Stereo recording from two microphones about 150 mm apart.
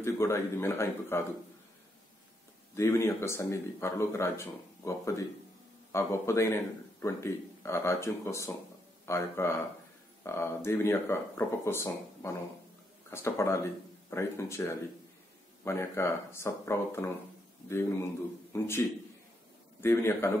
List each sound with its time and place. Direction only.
0.0 s speech: 15° left (ahead or behind)
2.7 s a man's voice: 15° left (ahead or behind)
15.6 s speech: 20° left (ahead or behind)
18.5 s a man's voice: 15° left (ahead or behind)